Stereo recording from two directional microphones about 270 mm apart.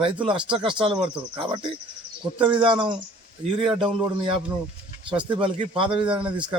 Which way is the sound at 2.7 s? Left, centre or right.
Centre.